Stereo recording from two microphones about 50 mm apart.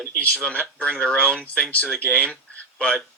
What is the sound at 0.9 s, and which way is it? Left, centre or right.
Speech, centre.